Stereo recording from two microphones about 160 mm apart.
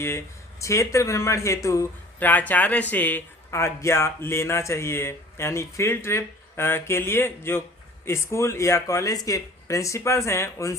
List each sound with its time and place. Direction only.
0.6 s speech: 20° left (ahead or behind)